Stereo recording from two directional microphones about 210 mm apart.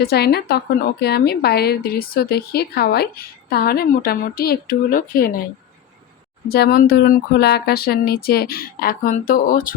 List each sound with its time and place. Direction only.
0.0 s speech: 50° left (ahead or behind)
6.5 s speech: 50° left (ahead or behind)